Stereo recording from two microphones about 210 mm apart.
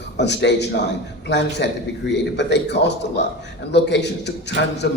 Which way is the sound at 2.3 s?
55° left (ahead or behind).